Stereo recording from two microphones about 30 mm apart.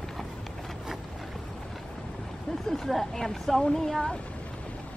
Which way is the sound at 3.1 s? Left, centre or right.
Centre.